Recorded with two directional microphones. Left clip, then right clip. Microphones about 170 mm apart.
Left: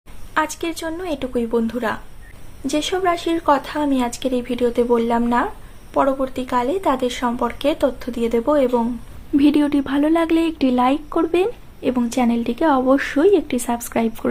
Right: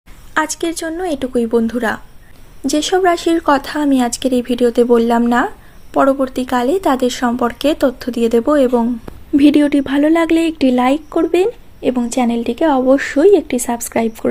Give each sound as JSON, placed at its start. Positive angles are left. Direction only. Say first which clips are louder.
{"t": 0.3, "sound": "speech", "louder": "right 4 dB", "side_deg": -35}
{"t": 9.3, "sound": "speech", "louder": "right 5 dB", "side_deg": -25}